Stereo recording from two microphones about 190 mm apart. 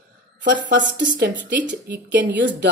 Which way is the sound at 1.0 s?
70° right (ahead or behind).